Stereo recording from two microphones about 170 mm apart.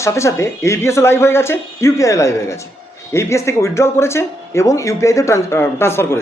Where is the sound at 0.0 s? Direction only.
15° left (ahead or behind).